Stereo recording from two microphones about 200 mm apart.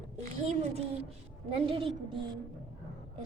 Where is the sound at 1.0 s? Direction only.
30° right (ahead or behind).